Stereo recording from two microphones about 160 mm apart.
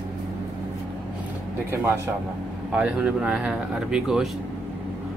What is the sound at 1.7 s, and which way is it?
Speech, 15° right (ahead or behind).